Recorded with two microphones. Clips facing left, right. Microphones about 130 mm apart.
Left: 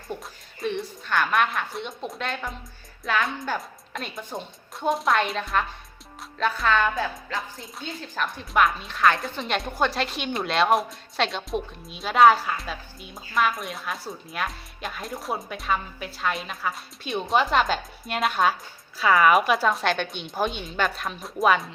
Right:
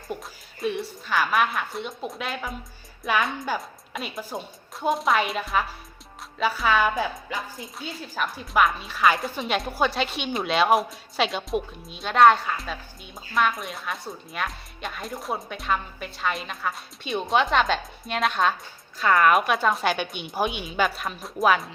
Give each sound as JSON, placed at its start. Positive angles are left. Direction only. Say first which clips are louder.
{"t": 0.1, "sound": "speech", "louder": "even", "side_deg": -5}
{"t": 7.3, "sound": "speech", "louder": "even", "side_deg": 0}